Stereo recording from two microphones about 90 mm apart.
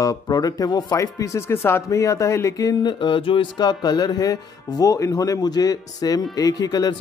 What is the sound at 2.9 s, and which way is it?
Music, 65° left (ahead or behind).